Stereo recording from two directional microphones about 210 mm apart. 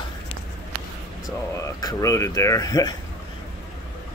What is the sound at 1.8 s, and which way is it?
Speech, 15° left (ahead or behind).